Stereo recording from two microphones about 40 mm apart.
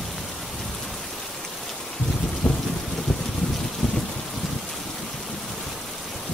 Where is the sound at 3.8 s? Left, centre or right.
Centre.